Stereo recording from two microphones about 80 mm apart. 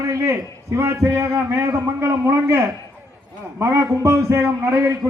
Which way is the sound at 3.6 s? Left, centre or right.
Right.